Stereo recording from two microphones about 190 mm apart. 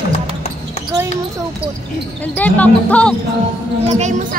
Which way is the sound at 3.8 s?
40° right (ahead or behind).